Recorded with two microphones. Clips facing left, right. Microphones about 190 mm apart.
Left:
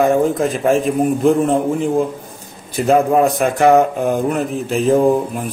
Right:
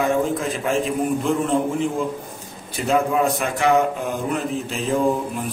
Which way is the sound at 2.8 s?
50° left (ahead or behind).